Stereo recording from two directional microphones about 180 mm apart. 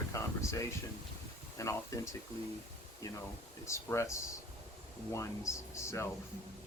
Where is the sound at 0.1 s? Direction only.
20° left (ahead or behind).